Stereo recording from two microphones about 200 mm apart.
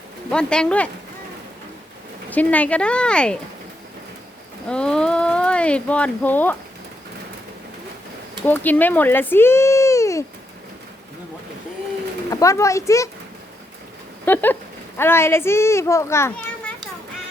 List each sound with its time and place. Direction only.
0.3 s speech: 5° left (ahead or behind)
2.3 s speech: 5° left (ahead or behind)
4.7 s speech: 5° left (ahead or behind)
8.4 s speech: 10° left (ahead or behind)
12.3 s a child's voice: 15° left (ahead or behind)
14.3 s a child's voice: 10° left (ahead or behind)